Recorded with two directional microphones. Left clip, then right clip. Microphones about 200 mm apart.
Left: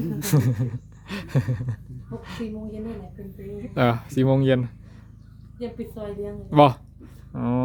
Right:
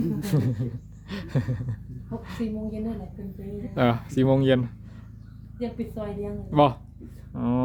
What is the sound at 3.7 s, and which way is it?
Groan, 15° left (ahead or behind).